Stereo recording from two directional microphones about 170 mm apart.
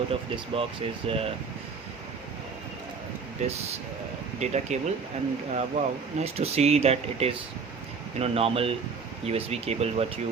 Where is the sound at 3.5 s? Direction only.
40° right (ahead or behind).